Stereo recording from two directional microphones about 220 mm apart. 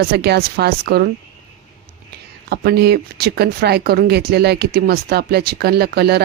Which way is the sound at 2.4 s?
45° right (ahead or behind).